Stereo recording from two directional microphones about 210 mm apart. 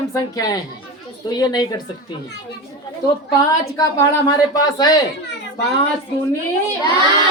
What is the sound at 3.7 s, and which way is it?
A woman's voice, 15° left (ahead or behind).